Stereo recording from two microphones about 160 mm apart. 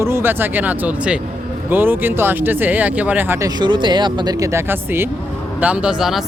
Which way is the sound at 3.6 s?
30° right (ahead or behind).